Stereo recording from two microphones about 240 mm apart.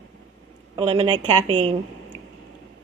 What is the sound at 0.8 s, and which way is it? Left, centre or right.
Speech, right.